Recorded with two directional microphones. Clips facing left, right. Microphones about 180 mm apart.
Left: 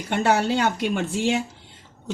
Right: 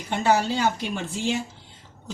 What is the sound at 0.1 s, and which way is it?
Speech, 65° left (ahead or behind).